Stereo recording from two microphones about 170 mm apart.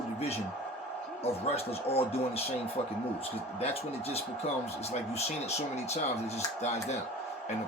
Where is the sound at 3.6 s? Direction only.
35° left (ahead or behind).